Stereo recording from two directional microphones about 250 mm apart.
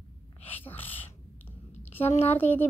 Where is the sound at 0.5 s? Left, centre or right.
Centre.